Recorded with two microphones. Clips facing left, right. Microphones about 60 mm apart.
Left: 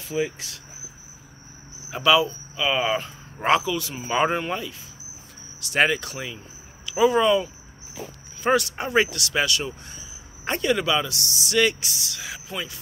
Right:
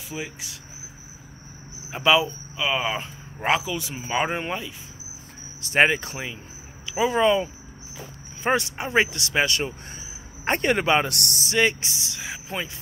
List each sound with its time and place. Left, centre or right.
0.1 s speech: centre
1.9 s speech: centre
3.7 s speech: centre
4.1 s speech: centre
5.6 s speech: right
11.4 s speech: right